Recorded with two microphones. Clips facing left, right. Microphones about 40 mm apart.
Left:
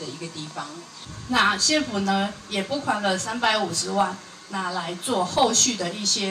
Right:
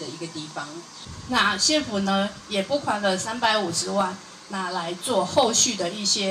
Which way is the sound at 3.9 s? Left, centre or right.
Left.